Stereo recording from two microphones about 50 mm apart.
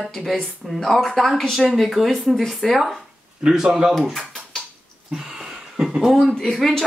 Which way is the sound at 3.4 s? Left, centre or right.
Centre.